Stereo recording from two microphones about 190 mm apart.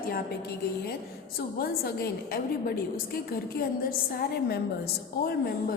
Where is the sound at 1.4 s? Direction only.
55° left (ahead or behind).